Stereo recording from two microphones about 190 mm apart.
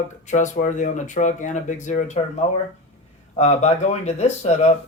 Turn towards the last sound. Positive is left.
turn(degrees=35)  # may be behind; listen again after turning